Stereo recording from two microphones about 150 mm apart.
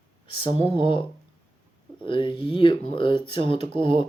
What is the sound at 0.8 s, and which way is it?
Speech, 35° left (ahead or behind).